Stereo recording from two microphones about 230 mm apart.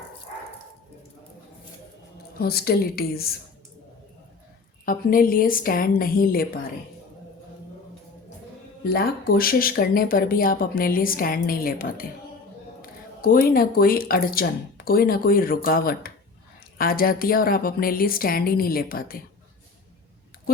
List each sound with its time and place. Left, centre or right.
2.4 s speech: left
4.9 s speech: left
8.8 s speech: left